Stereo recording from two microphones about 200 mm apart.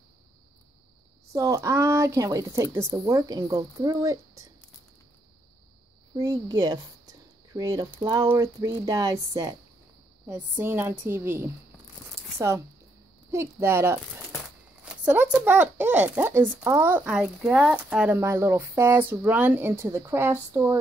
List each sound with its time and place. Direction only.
1.3 s speech: 15° right (ahead or behind)
6.1 s speech: 20° right (ahead or behind)
15.0 s speech: 10° right (ahead or behind)